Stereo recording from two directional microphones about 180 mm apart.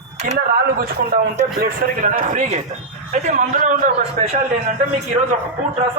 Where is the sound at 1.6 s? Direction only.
50° right (ahead or behind).